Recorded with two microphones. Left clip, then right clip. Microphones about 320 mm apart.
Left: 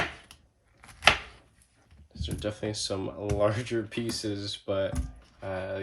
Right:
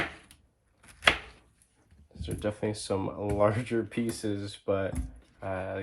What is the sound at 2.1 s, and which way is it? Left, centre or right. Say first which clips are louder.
Speech: right 1 dB; centre.